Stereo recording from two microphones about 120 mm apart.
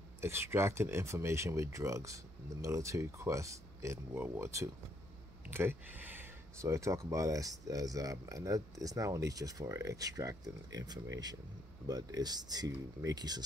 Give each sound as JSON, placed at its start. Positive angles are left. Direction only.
{"t": 0.2, "sound": "speech", "side_deg": -20}
{"t": 6.6, "sound": "speech", "side_deg": -25}